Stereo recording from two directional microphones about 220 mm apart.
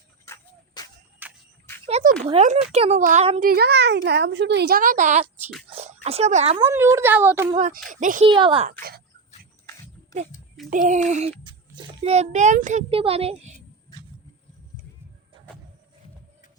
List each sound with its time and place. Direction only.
0.3 s a sound: 20° left (ahead or behind)
1.2 s a sound: 10° right (ahead or behind)
1.9 s a sound: 30° right (ahead or behind)
2.2 s a child's voice: 30° right (ahead or behind)
3.5 s speech: 50° right (ahead or behind); by 6.6 s 30° right (ahead or behind)
6.7 s speech: 10° right (ahead or behind)
7.9 s speech: 35° right (ahead or behind)
8.3 s a child's voice: 20° right (ahead or behind)
10.7 s a child's voice: 35° right (ahead or behind)